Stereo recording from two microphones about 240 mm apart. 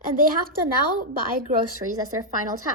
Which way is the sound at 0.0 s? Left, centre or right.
Right.